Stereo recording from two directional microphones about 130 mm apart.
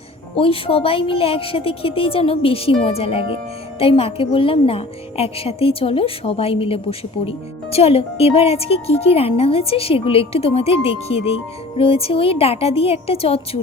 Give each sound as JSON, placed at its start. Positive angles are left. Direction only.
{"t": 0.3, "sound": "speech", "side_deg": 45}